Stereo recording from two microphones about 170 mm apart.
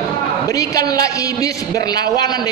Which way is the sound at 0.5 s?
20° left (ahead or behind).